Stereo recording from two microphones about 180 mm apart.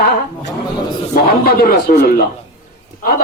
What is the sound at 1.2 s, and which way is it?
A man's voice, 55° left (ahead or behind).